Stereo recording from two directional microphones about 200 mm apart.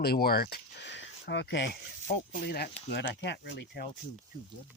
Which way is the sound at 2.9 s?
65° left (ahead or behind).